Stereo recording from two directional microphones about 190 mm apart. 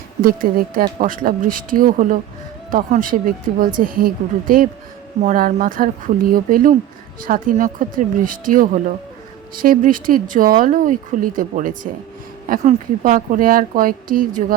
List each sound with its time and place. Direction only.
0.2 s a woman's voice: 50° right (ahead or behind)